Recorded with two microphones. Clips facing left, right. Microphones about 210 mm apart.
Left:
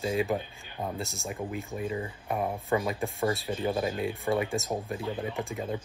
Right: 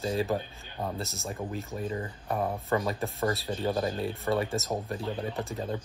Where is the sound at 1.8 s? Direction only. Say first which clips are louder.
Left 1 dB; 15° left (ahead or behind).